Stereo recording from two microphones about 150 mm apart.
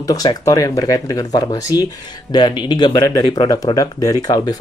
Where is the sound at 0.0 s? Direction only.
25° left (ahead or behind).